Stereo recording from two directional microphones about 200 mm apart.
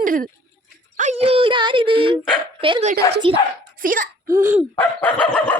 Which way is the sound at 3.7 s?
45° right (ahead or behind).